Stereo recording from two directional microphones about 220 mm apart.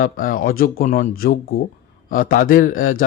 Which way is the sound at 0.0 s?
40° left (ahead or behind).